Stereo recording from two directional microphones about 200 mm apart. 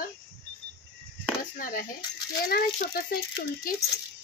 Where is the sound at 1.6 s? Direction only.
45° left (ahead or behind).